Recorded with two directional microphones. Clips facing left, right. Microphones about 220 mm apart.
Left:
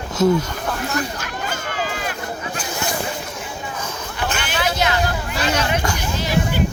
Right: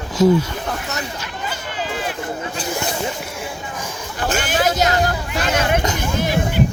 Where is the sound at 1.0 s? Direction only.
50° left (ahead or behind).